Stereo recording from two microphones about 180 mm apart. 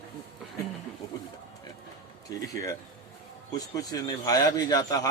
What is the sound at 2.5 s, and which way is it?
Speech, 20° left (ahead or behind).